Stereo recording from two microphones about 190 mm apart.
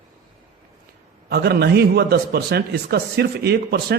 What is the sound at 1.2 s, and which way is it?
A man's voice, 55° right (ahead or behind).